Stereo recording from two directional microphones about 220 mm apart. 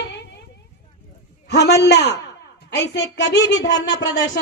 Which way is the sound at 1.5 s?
50° left (ahead or behind).